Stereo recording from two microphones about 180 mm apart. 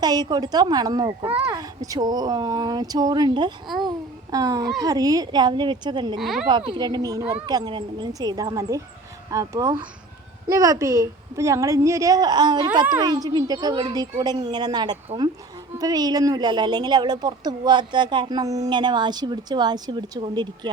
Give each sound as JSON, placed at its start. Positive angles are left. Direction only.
{"t": 0.0, "sound": "speech", "side_deg": -20}
{"t": 3.8, "sound": "babbling", "side_deg": -20}
{"t": 4.8, "sound": "speech", "side_deg": -20}
{"t": 6.1, "sound": "speech", "side_deg": 0}
{"t": 6.5, "sound": "a woman's voice", "side_deg": -25}